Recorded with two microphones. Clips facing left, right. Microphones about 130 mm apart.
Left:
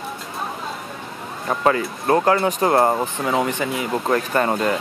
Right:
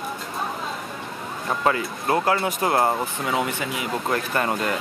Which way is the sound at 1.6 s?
35° left (ahead or behind).